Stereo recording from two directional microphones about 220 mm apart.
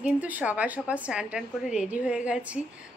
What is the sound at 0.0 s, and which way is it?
A woman's voice, 5° right (ahead or behind).